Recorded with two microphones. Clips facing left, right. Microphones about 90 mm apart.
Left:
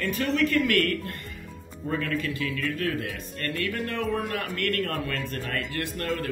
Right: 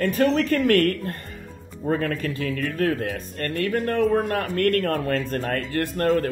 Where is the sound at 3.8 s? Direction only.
45° right (ahead or behind).